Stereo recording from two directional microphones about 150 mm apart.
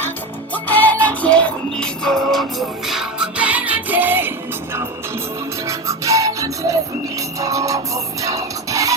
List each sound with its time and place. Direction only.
0.5 s music: 10° left (ahead or behind); by 9.0 s 20° right (ahead or behind)